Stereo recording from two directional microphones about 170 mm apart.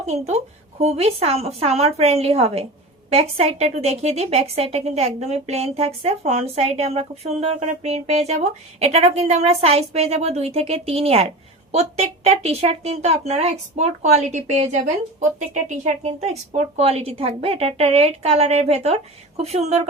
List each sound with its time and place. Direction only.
0.0 s a woman's voice: 40° right (ahead or behind)